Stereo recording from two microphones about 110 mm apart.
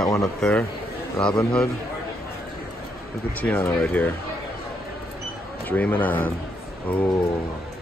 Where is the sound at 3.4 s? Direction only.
15° left (ahead or behind).